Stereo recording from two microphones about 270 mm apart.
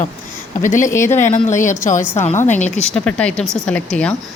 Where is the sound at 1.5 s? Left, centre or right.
Left.